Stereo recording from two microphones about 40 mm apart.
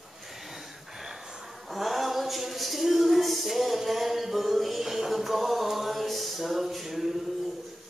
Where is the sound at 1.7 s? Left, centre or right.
Centre.